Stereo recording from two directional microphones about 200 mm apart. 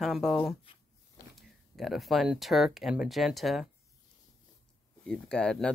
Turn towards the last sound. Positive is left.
turn(degrees=5)  # may be behind; listen again after turning